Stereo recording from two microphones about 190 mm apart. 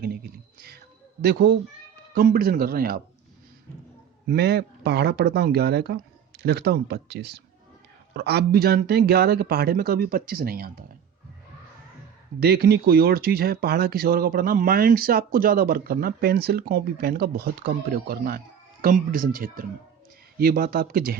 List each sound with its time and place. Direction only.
0.0 s a sound: 55° right (ahead or behind)
1.2 s speech: 55° right (ahead or behind)
4.3 s speech: 55° right (ahead or behind)
12.4 s speech: 55° right (ahead or behind)